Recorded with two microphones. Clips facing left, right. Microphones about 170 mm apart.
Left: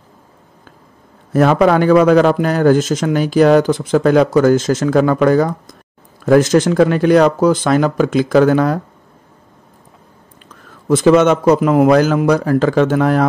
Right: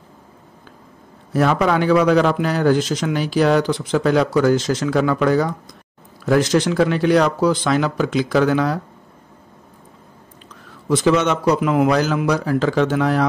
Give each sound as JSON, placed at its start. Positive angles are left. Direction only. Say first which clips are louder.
{"t": 1.3, "sound": "speech", "louder": "left 6 dB", "side_deg": 50}
{"t": 10.9, "sound": "speech", "louder": "left 6 dB", "side_deg": 50}